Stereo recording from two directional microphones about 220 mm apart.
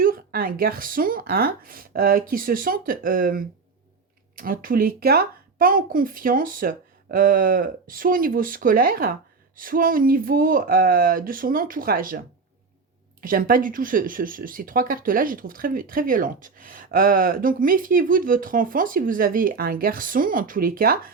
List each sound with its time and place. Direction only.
0.0 s speech: 40° right (ahead or behind)
13.2 s speech: 40° right (ahead or behind)